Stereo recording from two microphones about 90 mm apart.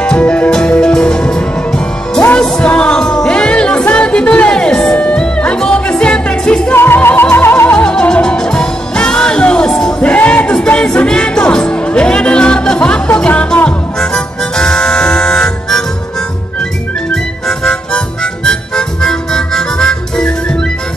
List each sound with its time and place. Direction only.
0.0 s music: 10° left (ahead or behind)
6.7 s music: 25° left (ahead or behind)
7.8 s music: 10° left (ahead or behind)
17.1 s harmonica: 10° left (ahead or behind)